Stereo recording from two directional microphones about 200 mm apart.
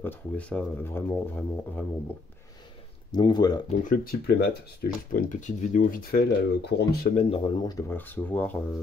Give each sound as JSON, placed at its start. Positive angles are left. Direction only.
{"t": 0.0, "sound": "speech", "side_deg": 5}
{"t": 3.1, "sound": "speech", "side_deg": 20}
{"t": 3.8, "sound": "speech", "side_deg": 45}
{"t": 7.2, "sound": "speech", "side_deg": 30}